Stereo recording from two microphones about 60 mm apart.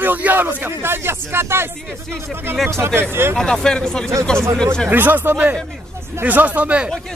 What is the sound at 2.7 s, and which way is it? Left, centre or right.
Speech, right.